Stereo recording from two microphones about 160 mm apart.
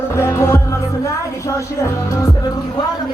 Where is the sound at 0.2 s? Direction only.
15° left (ahead or behind).